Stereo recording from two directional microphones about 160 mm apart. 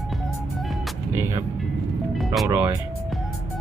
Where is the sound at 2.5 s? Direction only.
10° right (ahead or behind).